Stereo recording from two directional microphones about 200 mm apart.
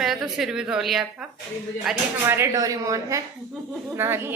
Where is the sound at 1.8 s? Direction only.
10° right (ahead or behind).